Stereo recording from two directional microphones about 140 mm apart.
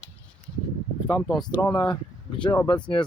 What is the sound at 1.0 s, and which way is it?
Speech, 30° left (ahead or behind).